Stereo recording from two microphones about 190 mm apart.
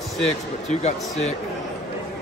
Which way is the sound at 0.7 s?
35° left (ahead or behind).